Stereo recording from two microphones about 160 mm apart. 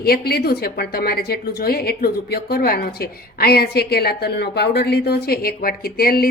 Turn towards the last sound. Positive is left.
turn(degrees=70)  # may be behind; listen again after turning